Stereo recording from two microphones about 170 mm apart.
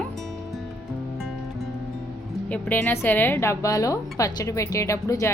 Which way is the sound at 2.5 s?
10° left (ahead or behind).